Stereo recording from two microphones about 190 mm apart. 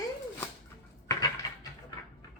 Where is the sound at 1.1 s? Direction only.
20° left (ahead or behind).